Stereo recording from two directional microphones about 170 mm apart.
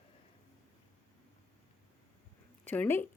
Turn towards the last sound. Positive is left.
turn(degrees=10)  # may be behind; listen again after turning